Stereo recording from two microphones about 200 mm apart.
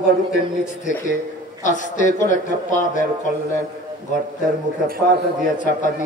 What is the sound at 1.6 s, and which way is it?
Speech, 40° left (ahead or behind).